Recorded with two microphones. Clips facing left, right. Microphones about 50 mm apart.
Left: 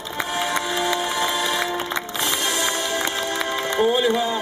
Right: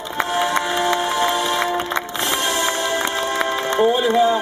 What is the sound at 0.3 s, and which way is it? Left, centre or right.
Music, centre.